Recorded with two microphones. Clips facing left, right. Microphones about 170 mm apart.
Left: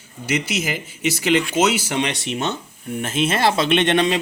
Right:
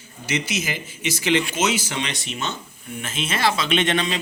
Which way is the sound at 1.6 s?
60° left (ahead or behind).